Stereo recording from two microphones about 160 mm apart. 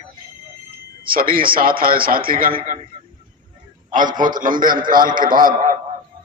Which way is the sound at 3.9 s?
55° right (ahead or behind).